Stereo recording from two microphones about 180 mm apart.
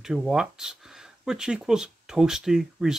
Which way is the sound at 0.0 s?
Centre (ahead or behind).